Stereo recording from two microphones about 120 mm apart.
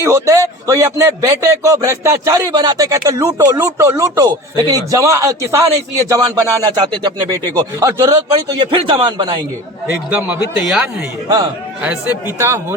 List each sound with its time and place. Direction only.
0.0 s speech: 25° right (ahead or behind); by 9.4 s 40° right (ahead or behind)
9.8 s a man's voice: 10° right (ahead or behind)